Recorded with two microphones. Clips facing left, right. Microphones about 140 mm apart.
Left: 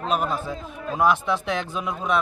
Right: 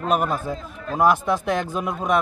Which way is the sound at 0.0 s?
55° right (ahead or behind).